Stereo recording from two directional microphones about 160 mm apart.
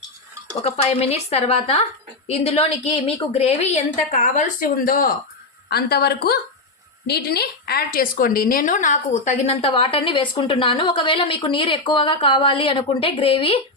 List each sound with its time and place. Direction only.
0.6 s a woman's voice: 40° left (ahead or behind); by 5.1 s 65° left (ahead or behind)
5.6 s a woman's voice: 80° left; by 13.6 s 35° left (ahead or behind)